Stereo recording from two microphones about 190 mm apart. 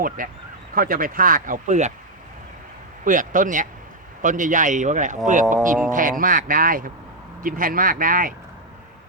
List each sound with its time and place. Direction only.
0.2 s speech: 45° right (ahead or behind)
3.0 s a man's voice: 45° right (ahead or behind)